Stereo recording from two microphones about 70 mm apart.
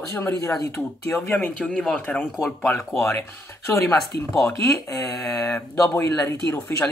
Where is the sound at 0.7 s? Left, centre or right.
Left.